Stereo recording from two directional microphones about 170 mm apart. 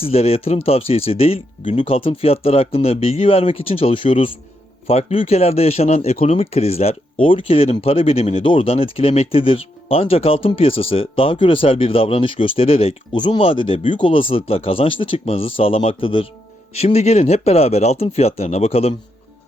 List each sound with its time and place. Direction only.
0.0 s speech: 35° left (ahead or behind)